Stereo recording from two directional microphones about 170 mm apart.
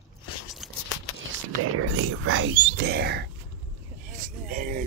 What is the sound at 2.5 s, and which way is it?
Speech, 75° right (ahead or behind).